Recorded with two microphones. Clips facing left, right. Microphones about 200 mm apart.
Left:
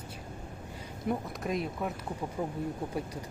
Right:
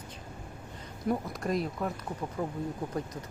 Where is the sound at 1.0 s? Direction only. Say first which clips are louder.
Right 2 dB; centre (ahead or behind).